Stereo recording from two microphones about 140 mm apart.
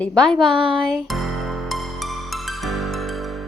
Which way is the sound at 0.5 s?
40° right (ahead or behind).